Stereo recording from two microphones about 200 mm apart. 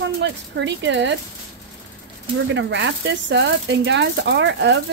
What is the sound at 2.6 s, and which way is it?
Speech, 65° right (ahead or behind).